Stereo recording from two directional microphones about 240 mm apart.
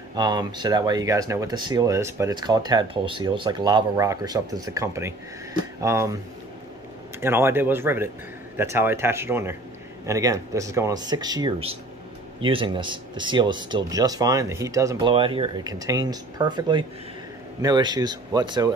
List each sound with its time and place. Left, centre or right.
0.1 s speech: centre
7.2 s speech: centre